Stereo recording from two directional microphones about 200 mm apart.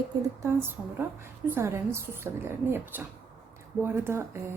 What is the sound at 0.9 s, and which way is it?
Speech, 10° right (ahead or behind).